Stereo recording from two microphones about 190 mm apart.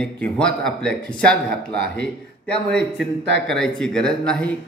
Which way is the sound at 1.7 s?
60° right (ahead or behind).